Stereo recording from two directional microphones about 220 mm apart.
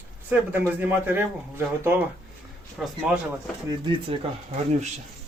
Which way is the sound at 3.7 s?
20° right (ahead or behind).